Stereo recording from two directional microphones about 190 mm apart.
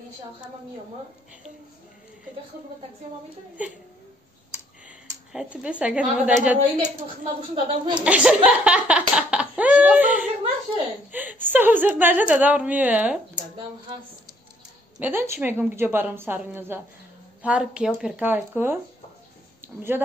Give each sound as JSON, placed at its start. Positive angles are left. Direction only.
{"t": 4.8, "sound": "speech", "side_deg": -5}
{"t": 7.5, "sound": "speech", "side_deg": -25}
{"t": 8.0, "sound": "a sound", "side_deg": -5}
{"t": 11.1, "sound": "a woman's voice", "side_deg": -10}
{"t": 15.0, "sound": "a woman's voice", "side_deg": -10}